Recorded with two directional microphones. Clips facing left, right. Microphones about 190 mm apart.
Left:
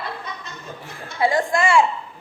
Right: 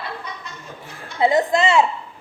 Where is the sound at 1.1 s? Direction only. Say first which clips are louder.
Right 3 dB; 20° right (ahead or behind).